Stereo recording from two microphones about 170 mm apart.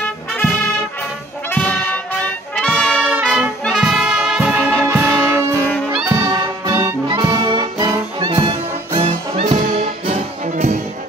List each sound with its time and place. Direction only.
1.5 s music: 10° left (ahead or behind)
3.0 s brass instrument: 10° right (ahead or behind)
5.5 s music: 10° left (ahead or behind)
6.0 s music: 15° right (ahead or behind)
7.1 s brass instrument: 25° right (ahead or behind)
9.4 s music: 45° right (ahead or behind)